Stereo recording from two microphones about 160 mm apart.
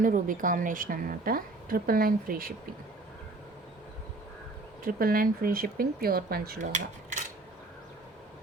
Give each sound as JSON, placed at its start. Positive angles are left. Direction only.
{"t": 0.0, "sound": "a woman's voice", "side_deg": -55}
{"t": 4.8, "sound": "a woman's voice", "side_deg": -60}
{"t": 6.6, "sound": "cutlery", "side_deg": -50}